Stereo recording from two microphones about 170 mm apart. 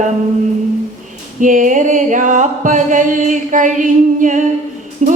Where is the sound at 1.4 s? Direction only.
50° right (ahead or behind).